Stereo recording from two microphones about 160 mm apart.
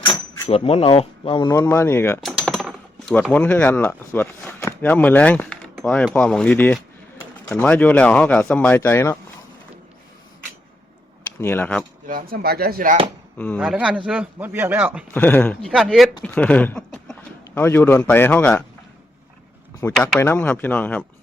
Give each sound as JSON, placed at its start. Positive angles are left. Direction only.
{"t": 0.0, "sound": "a sound", "side_deg": 25}
{"t": 0.5, "sound": "speech", "side_deg": 40}
{"t": 1.5, "sound": "speech", "side_deg": 20}
{"t": 2.2, "sound": "speech", "side_deg": 5}
{"t": 11.3, "sound": "speech", "side_deg": 15}
{"t": 12.0, "sound": "speech", "side_deg": -65}
{"t": 13.6, "sound": "a man's voice", "side_deg": -5}
{"t": 15.1, "sound": "speech", "side_deg": 10}
{"t": 15.7, "sound": "speech", "side_deg": -5}
{"t": 16.2, "sound": "a sound", "side_deg": 5}
{"t": 17.6, "sound": "speech", "side_deg": 15}
{"t": 19.8, "sound": "speech", "side_deg": 15}